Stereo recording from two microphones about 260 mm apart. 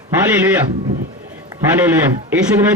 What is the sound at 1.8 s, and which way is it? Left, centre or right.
Speech, centre.